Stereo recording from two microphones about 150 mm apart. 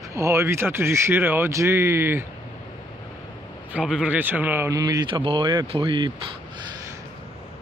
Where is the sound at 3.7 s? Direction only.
5° right (ahead or behind); by 6.1 s 30° right (ahead or behind).